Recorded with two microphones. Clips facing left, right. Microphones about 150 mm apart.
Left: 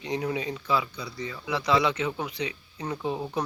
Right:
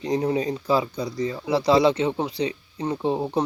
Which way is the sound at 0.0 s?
35° right (ahead or behind).